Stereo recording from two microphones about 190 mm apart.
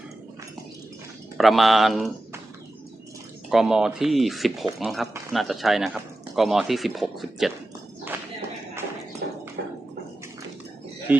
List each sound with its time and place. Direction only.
1.4 s speech: centre (ahead or behind)
3.5 s speech: 5° right (ahead or behind)
9.6 s a sound: 60° right (ahead or behind)
11.1 s speech: 10° right (ahead or behind)